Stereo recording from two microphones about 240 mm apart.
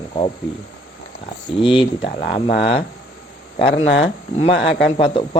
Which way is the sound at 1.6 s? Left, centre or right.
Left.